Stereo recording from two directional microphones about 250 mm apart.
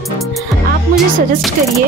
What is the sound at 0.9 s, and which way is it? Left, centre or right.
Speech, centre.